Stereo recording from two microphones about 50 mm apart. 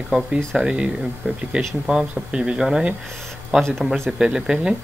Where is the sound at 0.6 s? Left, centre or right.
Centre.